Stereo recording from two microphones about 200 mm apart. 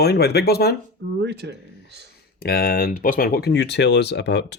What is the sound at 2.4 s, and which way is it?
Speech, 50° left (ahead or behind).